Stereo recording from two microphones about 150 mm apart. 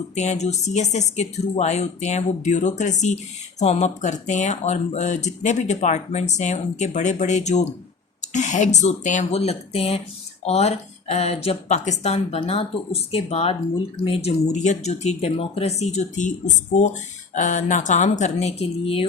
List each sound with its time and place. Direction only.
0.2 s speech: 50° left (ahead or behind)
17.3 s speech: 55° left (ahead or behind)